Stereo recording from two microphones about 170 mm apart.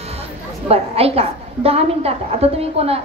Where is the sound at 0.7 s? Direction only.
35° right (ahead or behind).